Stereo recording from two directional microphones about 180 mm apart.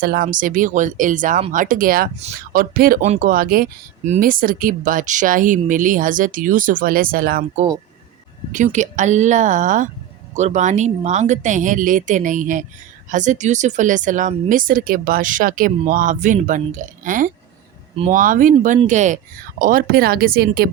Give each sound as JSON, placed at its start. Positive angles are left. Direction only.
{"t": 0.0, "sound": "speech", "side_deg": -55}